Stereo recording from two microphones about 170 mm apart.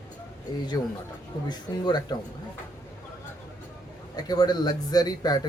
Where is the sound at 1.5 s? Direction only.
25° left (ahead or behind).